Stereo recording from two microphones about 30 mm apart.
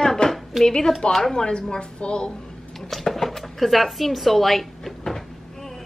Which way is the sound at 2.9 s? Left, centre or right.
Centre.